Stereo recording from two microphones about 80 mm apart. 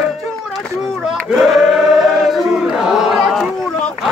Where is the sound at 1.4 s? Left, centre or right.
Centre.